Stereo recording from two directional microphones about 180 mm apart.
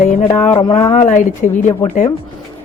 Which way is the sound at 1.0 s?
45° left (ahead or behind).